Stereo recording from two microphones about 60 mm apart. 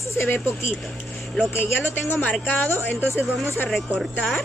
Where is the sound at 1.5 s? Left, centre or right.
Left.